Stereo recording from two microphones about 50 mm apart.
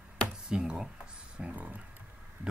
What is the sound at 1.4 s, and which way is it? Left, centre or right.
Speech, right.